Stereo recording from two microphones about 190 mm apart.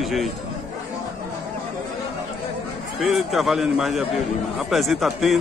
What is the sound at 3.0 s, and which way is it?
A man's voice, centre (ahead or behind).